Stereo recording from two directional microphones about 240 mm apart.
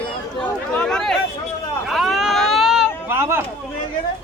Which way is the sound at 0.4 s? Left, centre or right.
Centre.